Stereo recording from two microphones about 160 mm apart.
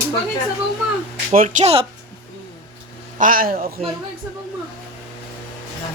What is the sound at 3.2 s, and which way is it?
Speech, 60° right (ahead or behind).